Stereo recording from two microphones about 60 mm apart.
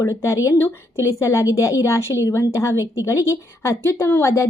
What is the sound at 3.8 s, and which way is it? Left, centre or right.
Speech, left.